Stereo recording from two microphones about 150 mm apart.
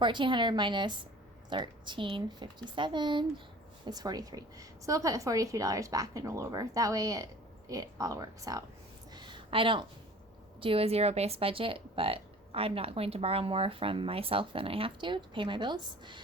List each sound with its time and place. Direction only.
0.0 s a woman's voice: 30° right (ahead or behind)
9.1 s a sound: 30° right (ahead or behind)
10.6 s speech: 40° right (ahead or behind)